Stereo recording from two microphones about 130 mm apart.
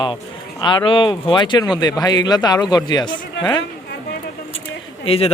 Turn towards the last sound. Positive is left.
turn(degrees=50)  # may be behind; listen again after turning